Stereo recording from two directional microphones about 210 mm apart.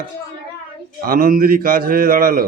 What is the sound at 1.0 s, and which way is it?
Speech, 40° right (ahead or behind).